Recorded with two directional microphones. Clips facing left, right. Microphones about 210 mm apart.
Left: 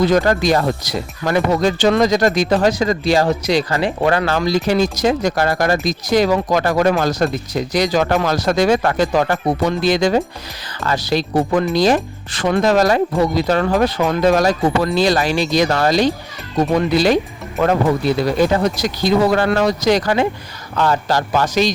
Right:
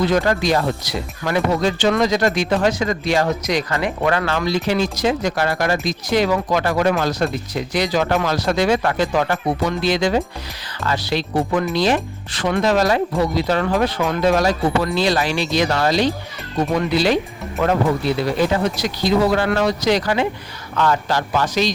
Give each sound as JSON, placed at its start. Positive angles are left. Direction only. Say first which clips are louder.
{"t": 0.0, "sound": "speech", "louder": "left 3 dB", "side_deg": 40}